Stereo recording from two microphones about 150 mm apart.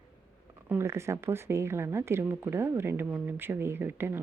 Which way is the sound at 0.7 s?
15° right (ahead or behind).